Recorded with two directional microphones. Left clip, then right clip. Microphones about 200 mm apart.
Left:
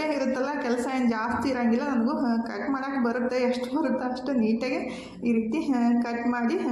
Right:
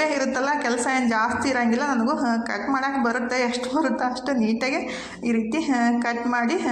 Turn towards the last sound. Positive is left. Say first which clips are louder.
# right 5 dB
turn(degrees=-15)  # may be behind; listen again after turning